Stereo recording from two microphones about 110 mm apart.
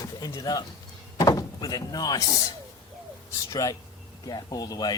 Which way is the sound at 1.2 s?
35° left (ahead or behind).